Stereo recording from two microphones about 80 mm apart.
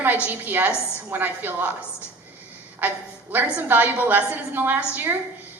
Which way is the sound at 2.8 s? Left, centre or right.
Right.